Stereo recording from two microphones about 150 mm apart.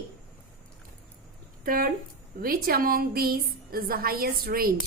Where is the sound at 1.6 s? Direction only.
70° right (ahead or behind).